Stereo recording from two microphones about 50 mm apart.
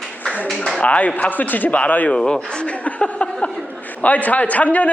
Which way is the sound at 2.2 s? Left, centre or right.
Left.